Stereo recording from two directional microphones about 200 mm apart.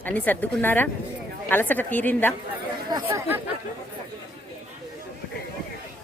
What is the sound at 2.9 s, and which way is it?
Speech, 15° right (ahead or behind).